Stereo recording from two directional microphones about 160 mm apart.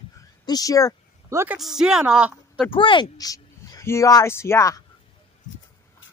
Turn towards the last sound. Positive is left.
turn(degrees=20)  # may be behind; listen again after turning